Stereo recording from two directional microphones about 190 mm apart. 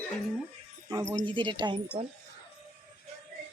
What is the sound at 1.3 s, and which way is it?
Speech, 25° right (ahead or behind).